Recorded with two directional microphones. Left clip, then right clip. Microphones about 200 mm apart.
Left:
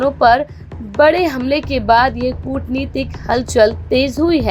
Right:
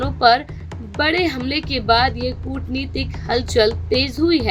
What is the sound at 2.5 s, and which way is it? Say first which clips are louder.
A woman's voice: left 5 dB; 10° left (ahead or behind).